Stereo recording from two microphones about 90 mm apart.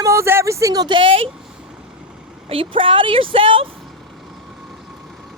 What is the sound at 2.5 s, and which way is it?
A woman's voice, 80° right.